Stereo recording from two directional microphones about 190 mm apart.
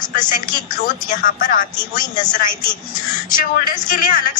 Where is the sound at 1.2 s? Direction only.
45° left (ahead or behind).